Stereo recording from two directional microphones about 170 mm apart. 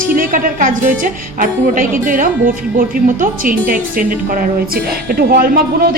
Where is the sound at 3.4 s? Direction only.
55° right (ahead or behind).